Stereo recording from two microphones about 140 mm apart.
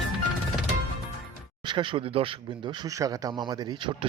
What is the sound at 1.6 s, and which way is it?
Speech, 35° right (ahead or behind).